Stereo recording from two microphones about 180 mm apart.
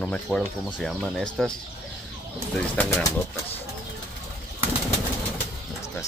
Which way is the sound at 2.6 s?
5° left (ahead or behind).